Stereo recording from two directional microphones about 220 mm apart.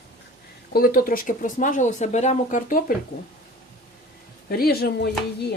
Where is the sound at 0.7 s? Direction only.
40° left (ahead or behind).